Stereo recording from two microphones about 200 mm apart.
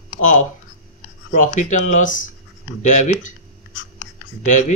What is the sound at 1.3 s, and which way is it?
Speech, 40° left (ahead or behind).